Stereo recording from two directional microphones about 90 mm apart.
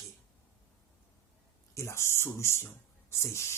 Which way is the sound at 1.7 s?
30° left (ahead or behind).